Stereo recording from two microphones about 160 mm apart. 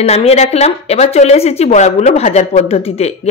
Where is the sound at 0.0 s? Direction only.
40° left (ahead or behind).